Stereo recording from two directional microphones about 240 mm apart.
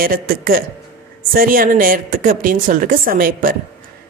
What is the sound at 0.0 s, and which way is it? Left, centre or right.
A woman's voice, right.